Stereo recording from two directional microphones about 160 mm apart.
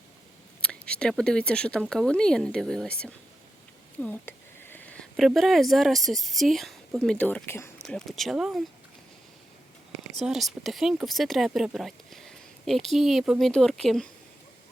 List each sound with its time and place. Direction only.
0.6 s speech: 5° left (ahead or behind)
7.9 s speech: centre (ahead or behind)
10.1 s speech: centre (ahead or behind)